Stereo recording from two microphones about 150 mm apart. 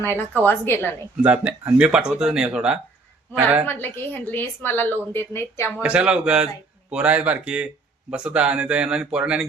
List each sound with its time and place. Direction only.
0.0 s a woman's voice: 15° left (ahead or behind)
1.2 s speech: 10° right (ahead or behind)
3.7 s a woman's voice: 15° left (ahead or behind)
5.8 s speech: 10° right (ahead or behind)